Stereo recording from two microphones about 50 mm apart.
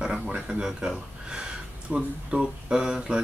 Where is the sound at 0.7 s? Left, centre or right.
Centre.